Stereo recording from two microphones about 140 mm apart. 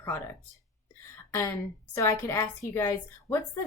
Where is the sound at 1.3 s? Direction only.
25° left (ahead or behind).